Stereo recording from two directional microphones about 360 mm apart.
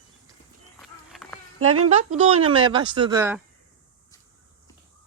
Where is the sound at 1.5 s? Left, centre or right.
Right.